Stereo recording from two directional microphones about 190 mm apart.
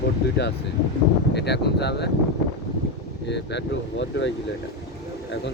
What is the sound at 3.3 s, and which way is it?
Speech, 65° left (ahead or behind).